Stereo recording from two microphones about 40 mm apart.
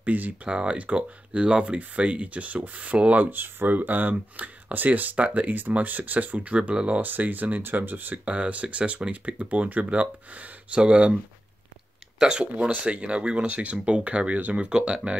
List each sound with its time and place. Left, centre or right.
0.0 s speech: right
0.5 s speech: right
3.2 s speech: right
4.1 s speech: right
4.7 s speech: right
8.3 s speech: right
12.2 s speech: right
12.7 s speech: right
14.7 s speech: right